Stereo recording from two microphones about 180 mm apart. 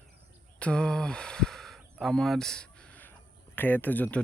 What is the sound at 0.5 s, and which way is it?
Speech, 5° left (ahead or behind).